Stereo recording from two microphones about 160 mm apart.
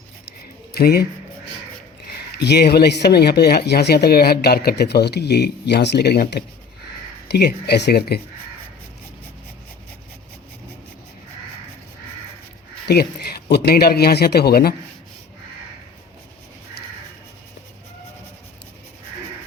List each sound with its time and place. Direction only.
0.7 s speech: 75° left (ahead or behind)
2.4 s speech: 90° left
12.9 s speech: 85° left